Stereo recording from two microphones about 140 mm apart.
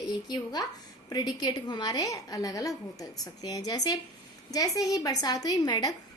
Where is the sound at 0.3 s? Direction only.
30° left (ahead or behind).